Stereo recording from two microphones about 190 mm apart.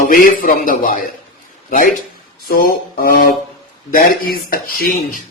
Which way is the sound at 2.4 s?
50° left (ahead or behind).